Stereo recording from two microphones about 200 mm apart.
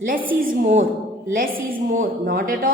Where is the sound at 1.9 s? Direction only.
45° right (ahead or behind).